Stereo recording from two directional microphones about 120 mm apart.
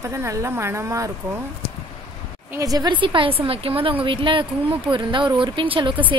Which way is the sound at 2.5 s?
30° right (ahead or behind).